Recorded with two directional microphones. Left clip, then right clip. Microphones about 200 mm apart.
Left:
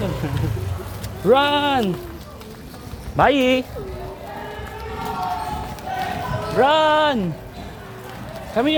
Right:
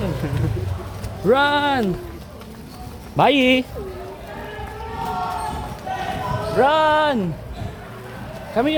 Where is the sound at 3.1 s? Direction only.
30° right (ahead or behind).